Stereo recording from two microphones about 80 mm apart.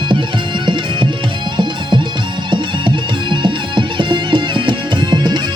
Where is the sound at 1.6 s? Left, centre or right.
Right.